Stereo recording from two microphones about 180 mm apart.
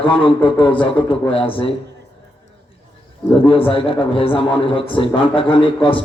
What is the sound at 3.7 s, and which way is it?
A man's voice, 30° left (ahead or behind).